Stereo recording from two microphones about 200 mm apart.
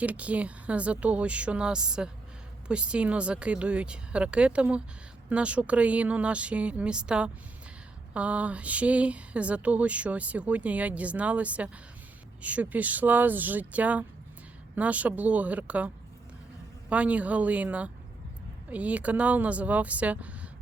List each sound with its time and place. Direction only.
0.0 s speech: 5° right (ahead or behind)
16.9 s speech: 5° right (ahead or behind)